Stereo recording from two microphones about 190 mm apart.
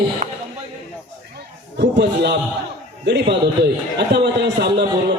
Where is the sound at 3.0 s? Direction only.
65° right (ahead or behind).